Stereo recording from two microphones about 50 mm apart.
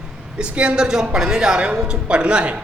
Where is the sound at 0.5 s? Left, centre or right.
Right.